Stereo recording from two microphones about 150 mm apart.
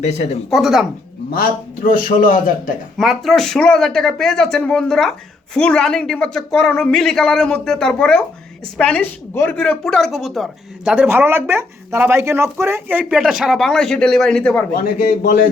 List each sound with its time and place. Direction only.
0.5 s speech: centre (ahead or behind)
1.3 s a man's voice: 75° left (ahead or behind)
3.0 s speech: centre (ahead or behind)
14.9 s a man's voice: 65° left (ahead or behind)